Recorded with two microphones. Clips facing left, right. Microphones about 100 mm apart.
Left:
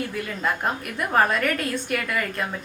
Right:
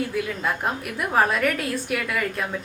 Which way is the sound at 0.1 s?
Centre (ahead or behind).